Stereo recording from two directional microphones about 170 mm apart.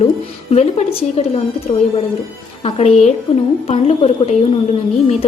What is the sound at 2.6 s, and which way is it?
A woman's voice, 40° left (ahead or behind).